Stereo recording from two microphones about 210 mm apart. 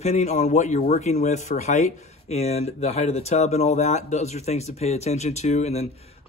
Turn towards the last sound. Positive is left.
turn(degrees=30)  # may be behind; listen again after turning